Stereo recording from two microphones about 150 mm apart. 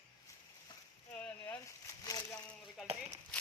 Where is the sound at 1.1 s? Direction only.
10° left (ahead or behind).